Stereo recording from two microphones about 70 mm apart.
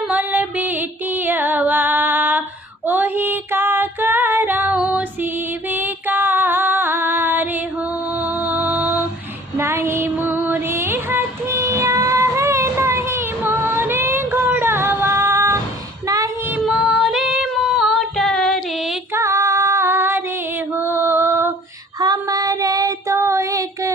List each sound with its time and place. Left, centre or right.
0.1 s music: right
2.8 s female singing: right
8.2 s music: right
9.6 s music: right
16.0 s a sound: right
16.6 s female singing: centre
19.1 s female singing: right
22.0 s female singing: right
23.0 s a sound: right